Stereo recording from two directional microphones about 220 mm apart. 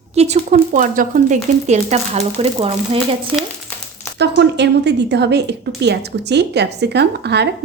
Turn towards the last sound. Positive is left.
turn(degrees=-50)  # may be behind; listen again after turning